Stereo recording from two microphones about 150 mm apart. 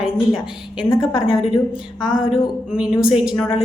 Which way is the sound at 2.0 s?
30° left (ahead or behind).